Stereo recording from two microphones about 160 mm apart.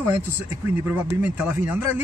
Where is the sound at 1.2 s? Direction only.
10° right (ahead or behind).